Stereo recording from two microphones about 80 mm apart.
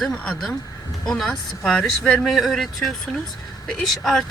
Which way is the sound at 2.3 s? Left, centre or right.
Centre.